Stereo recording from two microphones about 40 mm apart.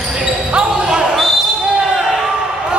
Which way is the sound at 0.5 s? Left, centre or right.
Right.